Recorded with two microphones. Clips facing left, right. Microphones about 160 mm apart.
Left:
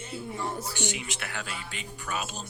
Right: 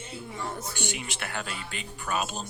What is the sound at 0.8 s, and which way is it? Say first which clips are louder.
Speech: left 1 dB; 60° right (ahead or behind).